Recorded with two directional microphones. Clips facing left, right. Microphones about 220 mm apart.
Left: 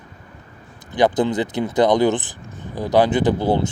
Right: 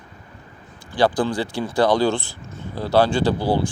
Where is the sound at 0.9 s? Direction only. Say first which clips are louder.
Left 2 dB; 20° left (ahead or behind).